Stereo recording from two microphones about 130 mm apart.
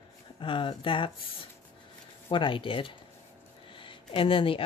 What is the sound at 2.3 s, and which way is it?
Speech, 40° left (ahead or behind).